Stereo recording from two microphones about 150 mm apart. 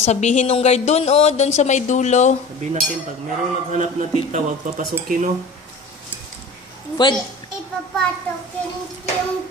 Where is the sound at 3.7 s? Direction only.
50° right (ahead or behind).